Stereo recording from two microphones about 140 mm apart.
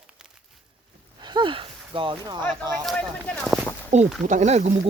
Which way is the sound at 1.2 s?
30° right (ahead or behind).